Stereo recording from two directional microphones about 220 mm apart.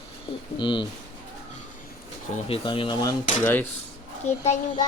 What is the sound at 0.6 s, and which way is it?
Speech, 20° left (ahead or behind).